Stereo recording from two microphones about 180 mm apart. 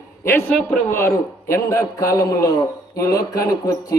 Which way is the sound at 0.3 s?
10° left (ahead or behind).